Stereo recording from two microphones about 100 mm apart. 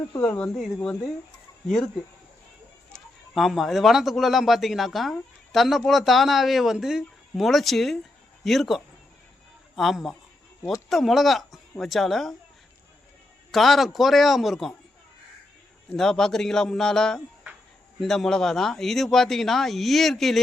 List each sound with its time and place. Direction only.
0.1 s speech: 20° left (ahead or behind)
1.6 s speech: 5° left (ahead or behind)
2.9 s speech: centre (ahead or behind)
13.5 s speech: centre (ahead or behind)
15.9 s speech: 5° left (ahead or behind)